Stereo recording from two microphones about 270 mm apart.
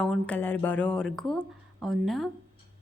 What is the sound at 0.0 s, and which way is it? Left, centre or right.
A woman's voice, centre.